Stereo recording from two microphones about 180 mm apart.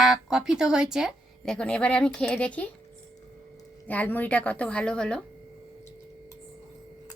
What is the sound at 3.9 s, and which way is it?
A woman's voice, 10° left (ahead or behind).